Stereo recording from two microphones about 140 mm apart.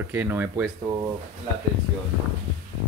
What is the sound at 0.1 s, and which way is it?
Speech, 15° right (ahead or behind).